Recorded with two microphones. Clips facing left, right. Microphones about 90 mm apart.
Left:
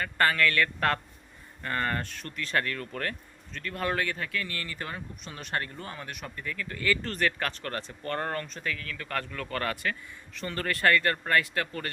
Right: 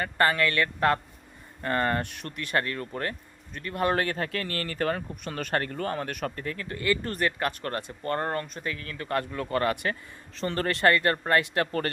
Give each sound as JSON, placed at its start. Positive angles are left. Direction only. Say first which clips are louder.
{"t": 0.0, "sound": "speech", "louder": "right 1 dB", "side_deg": -25}
{"t": 2.0, "sound": "speech", "louder": "right 3 dB", "side_deg": -20}
{"t": 3.9, "sound": "speech", "louder": "right 3 dB", "side_deg": -40}
{"t": 7.0, "sound": "speech", "louder": "right 2 dB", "side_deg": -20}
{"t": 10.3, "sound": "speech", "louder": "right 4 dB", "side_deg": -35}
{"t": 11.6, "sound": "speech", "louder": "right 7 dB", "side_deg": -50}